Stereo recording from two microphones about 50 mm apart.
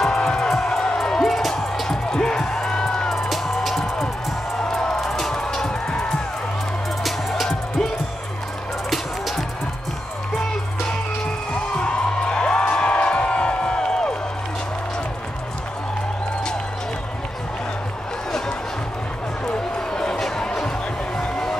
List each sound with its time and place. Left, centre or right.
0.0 s music: centre
3.2 s music: centre
7.0 s music: centre
8.9 s music: centre
11.5 s music: left
19.9 s music: centre